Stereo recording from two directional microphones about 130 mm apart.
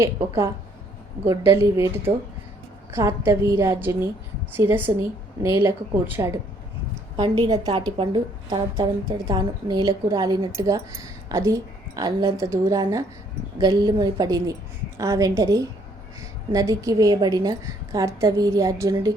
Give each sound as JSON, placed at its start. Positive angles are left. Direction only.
{"t": 0.0, "sound": "a woman's voice", "side_deg": -20}
{"t": 7.2, "sound": "a woman's voice", "side_deg": -30}